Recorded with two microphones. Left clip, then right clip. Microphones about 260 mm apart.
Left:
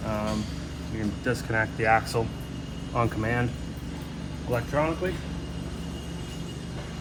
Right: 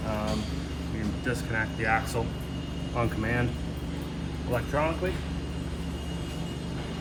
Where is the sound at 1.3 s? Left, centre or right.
Centre.